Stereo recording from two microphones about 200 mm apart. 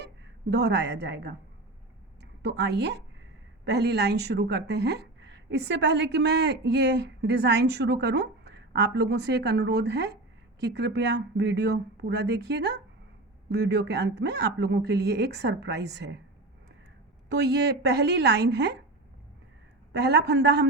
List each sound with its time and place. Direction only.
0.5 s speech: 55° right (ahead or behind)
2.4 s speech: 55° right (ahead or behind)
17.2 s speech: 55° right (ahead or behind)
19.9 s speech: 55° right (ahead or behind)